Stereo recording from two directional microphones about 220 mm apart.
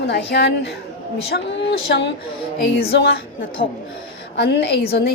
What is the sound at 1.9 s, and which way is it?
A woman's voice, 50° left (ahead or behind).